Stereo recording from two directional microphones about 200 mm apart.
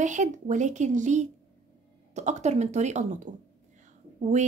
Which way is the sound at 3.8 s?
35° right (ahead or behind).